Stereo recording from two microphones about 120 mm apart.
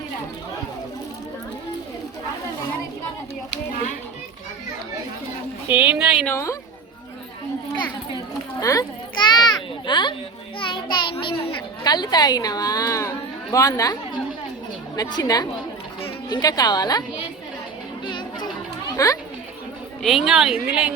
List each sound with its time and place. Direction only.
5.6 s a sound: 10° right (ahead or behind)
6.2 s a woman's voice: 25° left (ahead or behind)
8.6 s a woman's voice: 30° left (ahead or behind)
9.4 s a sound: 40° left (ahead or behind)
10.6 s a child's voice: 40° left (ahead or behind)
14.9 s a woman's voice: 35° left (ahead or behind)
18.0 s music: 40° left (ahead or behind)
18.9 s speech: 30° left (ahead or behind)
20.0 s speech: centre (ahead or behind)